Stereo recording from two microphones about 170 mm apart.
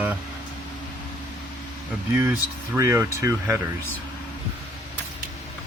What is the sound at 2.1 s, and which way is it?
Speech, 15° right (ahead or behind).